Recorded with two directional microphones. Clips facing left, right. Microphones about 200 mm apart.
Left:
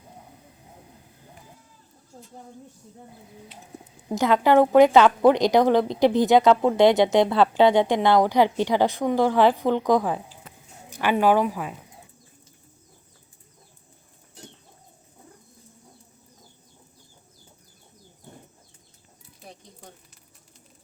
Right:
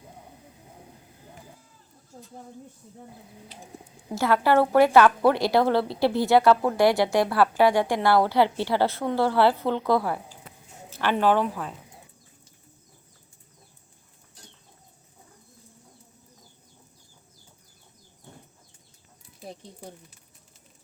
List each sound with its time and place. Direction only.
4.1 s a woman's voice: 15° left (ahead or behind)